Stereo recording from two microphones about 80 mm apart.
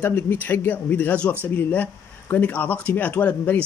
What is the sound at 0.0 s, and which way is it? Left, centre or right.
Speech, left.